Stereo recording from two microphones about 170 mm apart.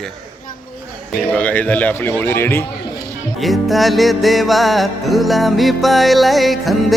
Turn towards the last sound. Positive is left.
turn(degrees=0)  # may be behind; listen again after turning